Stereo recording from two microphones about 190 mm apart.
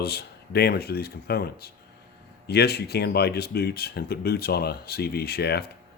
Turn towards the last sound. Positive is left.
turn(degrees=60)  # may be behind; listen again after turning